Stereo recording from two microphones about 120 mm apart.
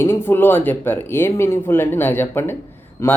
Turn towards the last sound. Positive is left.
turn(degrees=25)  # may be behind; listen again after turning